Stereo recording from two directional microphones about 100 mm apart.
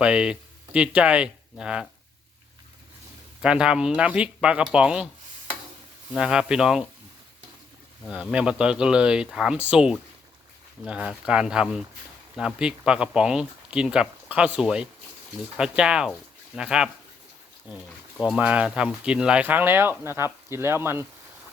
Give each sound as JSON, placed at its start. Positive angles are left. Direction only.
{"t": 0.0, "sound": "speech", "side_deg": -10}
{"t": 3.4, "sound": "speech", "side_deg": -10}
{"t": 6.1, "sound": "speech", "side_deg": -10}
{"t": 8.0, "sound": "speech", "side_deg": -10}